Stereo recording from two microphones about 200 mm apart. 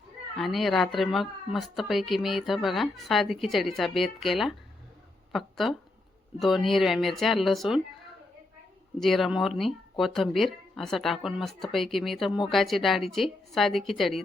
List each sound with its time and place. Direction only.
0.3 s speech: centre (ahead or behind)
9.0 s speech: centre (ahead or behind)